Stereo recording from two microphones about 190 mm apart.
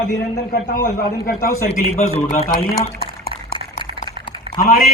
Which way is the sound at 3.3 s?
25° right (ahead or behind).